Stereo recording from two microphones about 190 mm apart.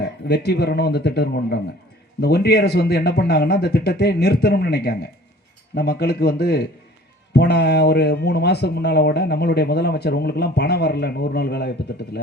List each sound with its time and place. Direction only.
0.0 s speech: 60° left (ahead or behind)